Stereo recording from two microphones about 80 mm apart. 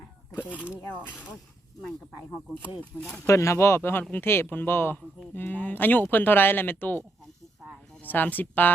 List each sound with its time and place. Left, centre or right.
0.5 s speech: centre
3.2 s speech: left
8.0 s speech: left